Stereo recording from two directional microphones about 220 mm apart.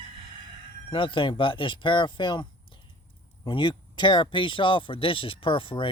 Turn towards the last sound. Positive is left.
turn(degrees=25)  # may be behind; listen again after turning